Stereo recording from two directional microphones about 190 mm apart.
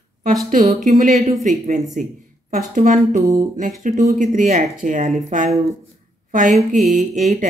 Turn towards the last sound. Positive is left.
turn(degrees=-45)  # may be behind; listen again after turning